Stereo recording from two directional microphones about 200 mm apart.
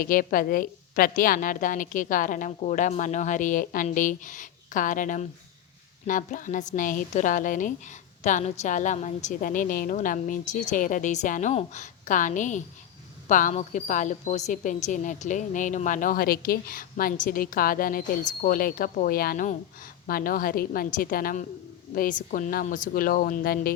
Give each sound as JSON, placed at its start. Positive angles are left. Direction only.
{"t": 0.0, "sound": "a woman's voice", "side_deg": 45}